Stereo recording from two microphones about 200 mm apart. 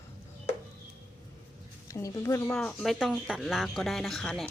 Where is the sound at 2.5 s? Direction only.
5° left (ahead or behind).